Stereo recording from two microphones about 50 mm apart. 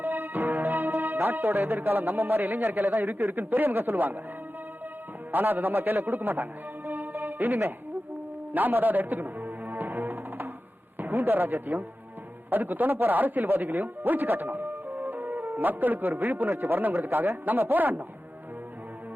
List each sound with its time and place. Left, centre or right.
0.0 s music: right
2.9 s a man's voice: right
5.3 s a man's voice: right
8.5 s music: right
11.0 s a man's voice: right